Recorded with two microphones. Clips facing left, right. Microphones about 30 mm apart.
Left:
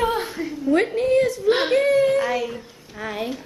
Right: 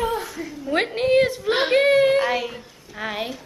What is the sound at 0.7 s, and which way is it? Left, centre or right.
Speech, right.